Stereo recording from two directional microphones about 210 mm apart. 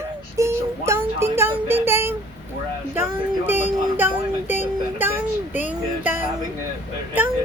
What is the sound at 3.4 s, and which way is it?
Speech, 10° right (ahead or behind).